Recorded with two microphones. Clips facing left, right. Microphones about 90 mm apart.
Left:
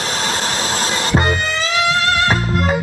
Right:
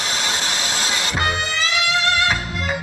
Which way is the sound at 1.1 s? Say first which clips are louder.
Left 7 dB; 40° left (ahead or behind).